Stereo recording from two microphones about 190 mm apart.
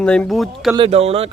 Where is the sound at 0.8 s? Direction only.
30° right (ahead or behind).